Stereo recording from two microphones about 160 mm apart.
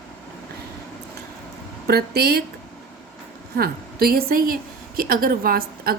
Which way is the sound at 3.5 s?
70° right (ahead or behind).